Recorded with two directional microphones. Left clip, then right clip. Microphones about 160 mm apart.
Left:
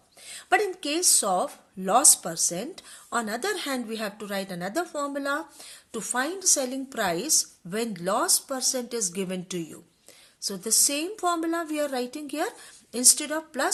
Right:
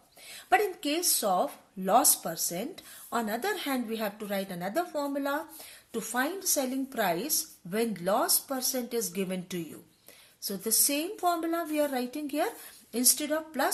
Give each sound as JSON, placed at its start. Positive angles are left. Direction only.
{"t": 0.3, "sound": "speech", "side_deg": 25}